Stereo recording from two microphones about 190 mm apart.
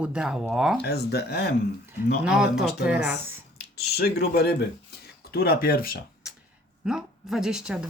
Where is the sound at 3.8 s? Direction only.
55° left (ahead or behind).